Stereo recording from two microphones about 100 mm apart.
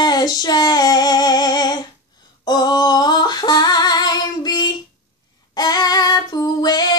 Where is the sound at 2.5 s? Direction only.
45° left (ahead or behind).